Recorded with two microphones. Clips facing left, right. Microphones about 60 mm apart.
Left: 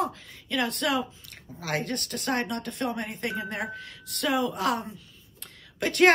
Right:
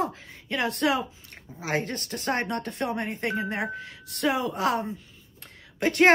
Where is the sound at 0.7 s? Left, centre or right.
Right.